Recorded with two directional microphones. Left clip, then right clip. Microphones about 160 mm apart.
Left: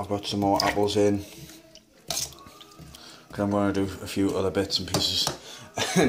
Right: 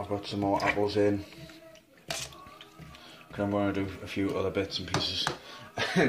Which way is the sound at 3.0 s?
15° left (ahead or behind).